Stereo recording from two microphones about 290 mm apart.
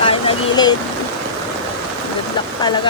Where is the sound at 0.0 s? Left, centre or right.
Centre.